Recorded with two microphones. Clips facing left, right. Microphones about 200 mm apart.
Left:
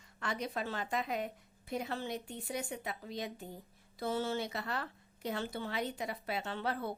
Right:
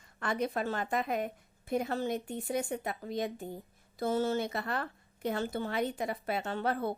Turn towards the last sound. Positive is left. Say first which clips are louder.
# right 5 dB
turn(degrees=-50)  # may be behind; listen again after turning